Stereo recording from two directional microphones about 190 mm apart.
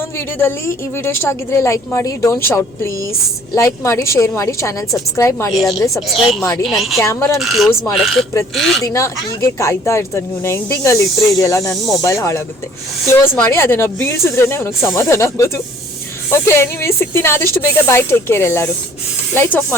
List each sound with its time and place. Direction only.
1.0 s speech: 15° left (ahead or behind)
6.7 s speech: centre (ahead or behind)
7.0 s speech: 15° left (ahead or behind)
7.3 s speech: centre (ahead or behind)
8.8 s speech: 15° left (ahead or behind)